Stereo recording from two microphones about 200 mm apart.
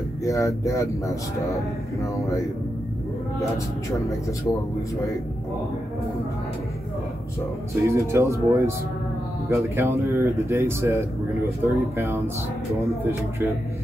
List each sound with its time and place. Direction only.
0.2 s speech: 15° left (ahead or behind)
7.8 s speech: 15° right (ahead or behind)